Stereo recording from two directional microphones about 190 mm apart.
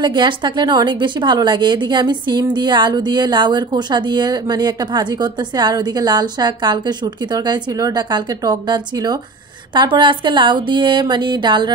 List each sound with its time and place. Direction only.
0.0 s a woman's voice: 25° right (ahead or behind)